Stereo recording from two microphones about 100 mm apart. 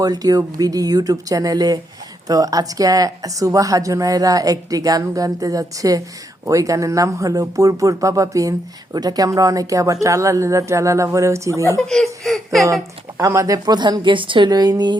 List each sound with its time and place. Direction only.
0.0 s speech: 40° right (ahead or behind)
11.8 s speech: 5° left (ahead or behind)
12.6 s speech: 35° right (ahead or behind)